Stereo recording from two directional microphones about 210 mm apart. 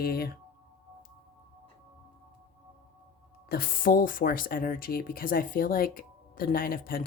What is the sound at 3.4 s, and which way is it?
Speech, 45° left (ahead or behind).